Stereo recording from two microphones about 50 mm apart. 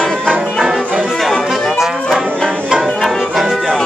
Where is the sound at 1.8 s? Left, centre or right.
Centre.